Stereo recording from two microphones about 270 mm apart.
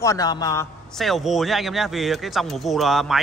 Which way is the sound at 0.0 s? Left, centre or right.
Centre.